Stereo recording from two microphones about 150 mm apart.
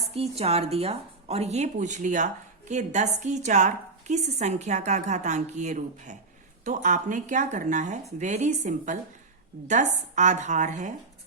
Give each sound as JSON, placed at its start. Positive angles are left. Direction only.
{"t": 0.1, "sound": "speech", "side_deg": -45}